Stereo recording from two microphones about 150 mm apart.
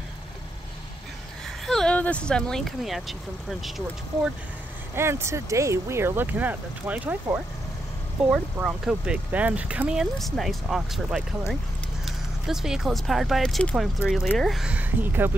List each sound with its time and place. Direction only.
1.7 s speech: 5° left (ahead or behind)
4.9 s speech: 15° right (ahead or behind)